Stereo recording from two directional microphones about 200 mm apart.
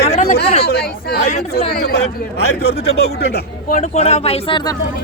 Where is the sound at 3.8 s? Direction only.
30° left (ahead or behind).